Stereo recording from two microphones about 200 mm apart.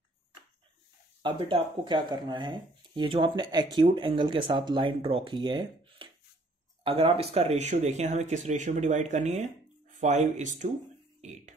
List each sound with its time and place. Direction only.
1.2 s speech: 25° right (ahead or behind)